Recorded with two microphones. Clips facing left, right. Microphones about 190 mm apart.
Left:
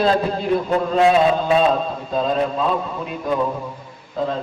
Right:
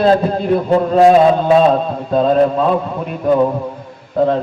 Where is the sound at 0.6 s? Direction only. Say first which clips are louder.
Right 7 dB; 40° right (ahead or behind).